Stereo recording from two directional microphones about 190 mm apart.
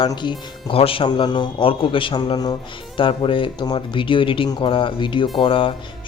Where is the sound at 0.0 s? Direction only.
25° left (ahead or behind).